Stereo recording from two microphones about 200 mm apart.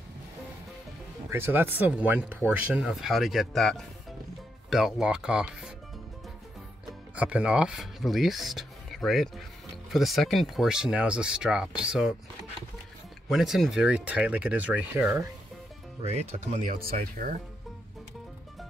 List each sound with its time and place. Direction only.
1.3 s speech: 10° right (ahead or behind)
7.2 s speech: 5° right (ahead or behind)
13.3 s speech: centre (ahead or behind)
16.1 s speech: 35° right (ahead or behind)